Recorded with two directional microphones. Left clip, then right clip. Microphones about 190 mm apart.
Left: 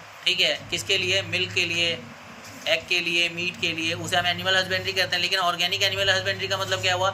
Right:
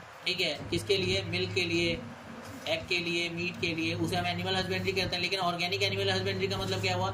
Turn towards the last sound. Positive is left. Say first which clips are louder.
# left 8 dB
turn(degrees=0)  # may be behind; listen again after turning